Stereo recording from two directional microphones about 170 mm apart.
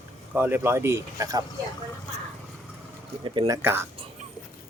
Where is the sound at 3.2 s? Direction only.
25° right (ahead or behind).